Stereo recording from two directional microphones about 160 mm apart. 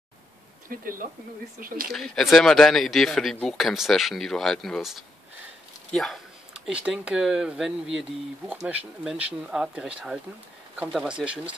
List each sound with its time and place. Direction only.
0.7 s speech: 60° right (ahead or behind)
1.9 s speech: centre (ahead or behind)